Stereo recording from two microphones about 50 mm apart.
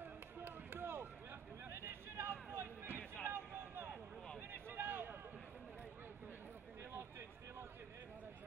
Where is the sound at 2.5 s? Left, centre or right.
Right.